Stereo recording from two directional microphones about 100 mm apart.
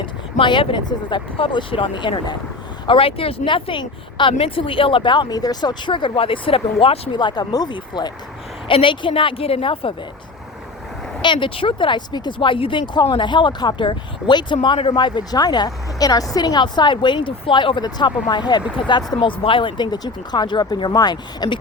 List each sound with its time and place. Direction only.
0.0 s speech: 55° left (ahead or behind)
2.8 s speech: 65° left (ahead or behind)
4.4 s speech: 70° left (ahead or behind)
7.1 s speech: 50° left (ahead or behind)
8.6 s speech: 60° left (ahead or behind)
11.2 s speech: 55° left (ahead or behind)